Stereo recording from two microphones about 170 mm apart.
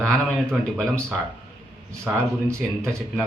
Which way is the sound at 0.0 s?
5° left (ahead or behind).